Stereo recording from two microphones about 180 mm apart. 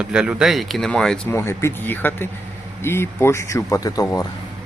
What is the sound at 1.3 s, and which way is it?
Speech, 15° left (ahead or behind).